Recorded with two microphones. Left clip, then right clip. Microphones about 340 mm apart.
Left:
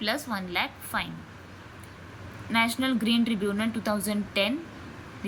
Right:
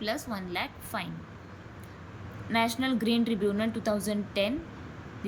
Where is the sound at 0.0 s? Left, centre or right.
Centre.